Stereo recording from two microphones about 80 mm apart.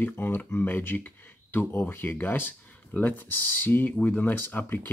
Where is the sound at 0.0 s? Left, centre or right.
Left.